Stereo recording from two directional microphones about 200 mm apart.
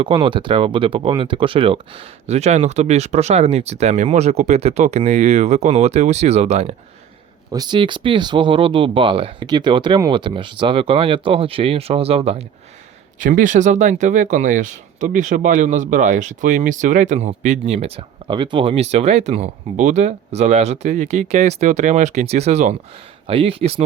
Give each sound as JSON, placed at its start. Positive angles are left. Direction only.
{"t": 0.0, "sound": "speech", "side_deg": -25}
{"t": 7.5, "sound": "speech", "side_deg": -20}
{"t": 13.1, "sound": "speech", "side_deg": -40}